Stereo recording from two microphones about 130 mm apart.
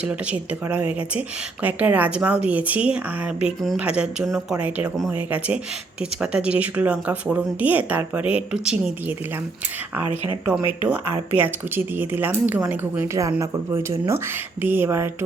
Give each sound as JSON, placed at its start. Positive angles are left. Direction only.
{"t": 0.0, "sound": "speech", "side_deg": -10}
{"t": 6.3, "sound": "speech", "side_deg": -10}
{"t": 10.2, "sound": "speech", "side_deg": -10}